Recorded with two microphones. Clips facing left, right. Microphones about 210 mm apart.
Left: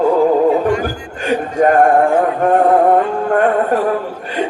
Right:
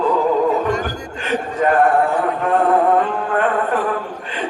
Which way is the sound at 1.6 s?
45° left (ahead or behind).